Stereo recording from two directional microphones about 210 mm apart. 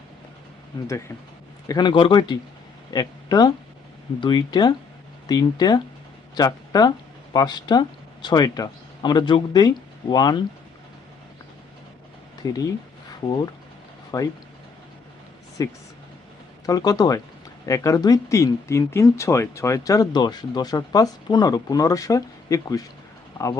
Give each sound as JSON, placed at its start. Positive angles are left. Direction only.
{"t": 0.9, "sound": "speech", "side_deg": 15}
{"t": 12.4, "sound": "speech", "side_deg": 15}
{"t": 15.6, "sound": "speech", "side_deg": 15}